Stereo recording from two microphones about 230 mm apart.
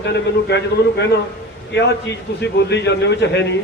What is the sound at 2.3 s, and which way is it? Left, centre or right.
A man's voice, left.